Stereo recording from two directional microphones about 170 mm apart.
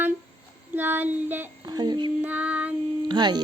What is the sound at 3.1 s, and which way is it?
Speech, 25° right (ahead or behind).